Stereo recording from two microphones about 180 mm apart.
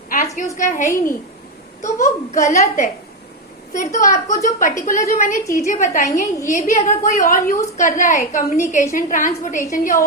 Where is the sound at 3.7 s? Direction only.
45° left (ahead or behind).